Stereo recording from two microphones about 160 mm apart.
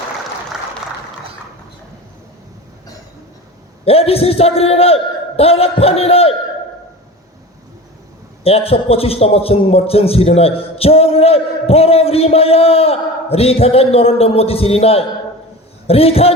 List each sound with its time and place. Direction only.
3.8 s a man's voice: 40° left (ahead or behind)
8.4 s a man's voice: 40° left (ahead or behind)